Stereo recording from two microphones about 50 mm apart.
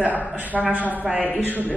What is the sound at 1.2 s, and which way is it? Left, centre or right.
Speech, left.